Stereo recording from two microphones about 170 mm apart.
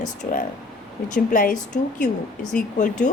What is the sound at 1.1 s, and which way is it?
A woman's voice, 50° left (ahead or behind).